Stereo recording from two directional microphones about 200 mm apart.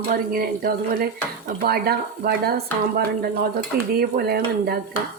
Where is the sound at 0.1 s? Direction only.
50° right (ahead or behind).